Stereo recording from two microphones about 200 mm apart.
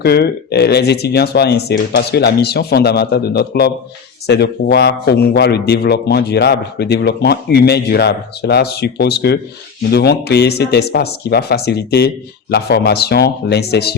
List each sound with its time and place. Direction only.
0.0 s a man's voice: 55° left (ahead or behind)